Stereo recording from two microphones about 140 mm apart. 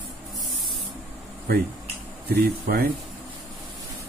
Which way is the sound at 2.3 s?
90° right.